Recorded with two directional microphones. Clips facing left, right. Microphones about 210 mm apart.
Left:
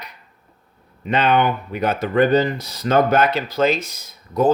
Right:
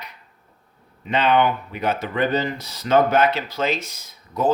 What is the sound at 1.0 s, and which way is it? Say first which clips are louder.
Speech: left 1 dB; 45° left (ahead or behind).